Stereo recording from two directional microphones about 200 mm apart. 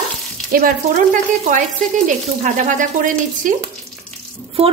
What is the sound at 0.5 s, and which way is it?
Speech, 45° right (ahead or behind).